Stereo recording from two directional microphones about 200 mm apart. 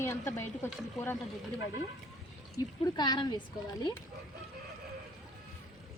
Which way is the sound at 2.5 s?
20° left (ahead or behind).